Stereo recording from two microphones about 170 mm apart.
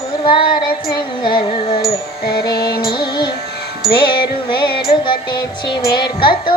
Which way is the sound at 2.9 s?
25° left (ahead or behind).